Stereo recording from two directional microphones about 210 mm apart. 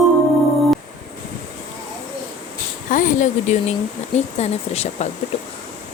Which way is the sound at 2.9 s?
40° left (ahead or behind).